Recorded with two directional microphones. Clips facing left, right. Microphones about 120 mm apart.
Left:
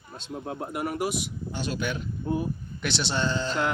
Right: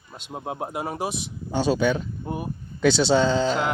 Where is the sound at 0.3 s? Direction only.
75° right (ahead or behind).